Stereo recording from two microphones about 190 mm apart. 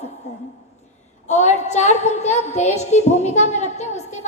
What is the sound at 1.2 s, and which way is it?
A woman's voice, 35° left (ahead or behind).